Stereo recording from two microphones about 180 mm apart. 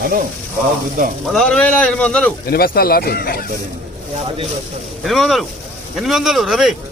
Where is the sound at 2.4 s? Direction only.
55° left (ahead or behind).